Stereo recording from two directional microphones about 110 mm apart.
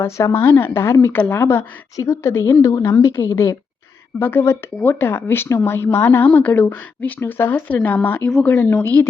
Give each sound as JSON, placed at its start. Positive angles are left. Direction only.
{"t": 0.0, "sound": "a woman's voice", "side_deg": 25}